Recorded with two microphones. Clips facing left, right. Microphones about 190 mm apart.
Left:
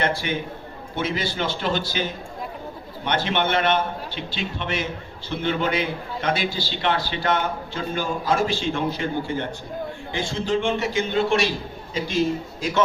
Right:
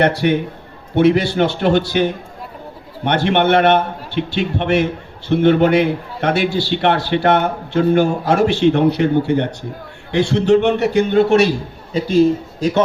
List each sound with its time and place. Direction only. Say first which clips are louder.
0.0 s a man's voice: right 9 dB; 65° right (ahead or behind)
11.1 s a man's voice: right 8 dB; 45° right (ahead or behind)